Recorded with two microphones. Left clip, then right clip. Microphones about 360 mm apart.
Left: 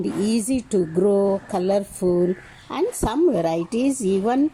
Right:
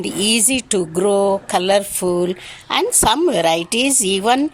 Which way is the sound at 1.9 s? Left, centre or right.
Right.